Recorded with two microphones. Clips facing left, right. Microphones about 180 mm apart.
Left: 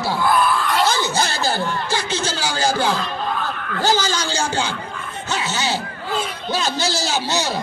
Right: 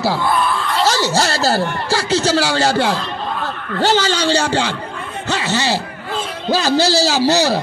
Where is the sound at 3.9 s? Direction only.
70° right (ahead or behind).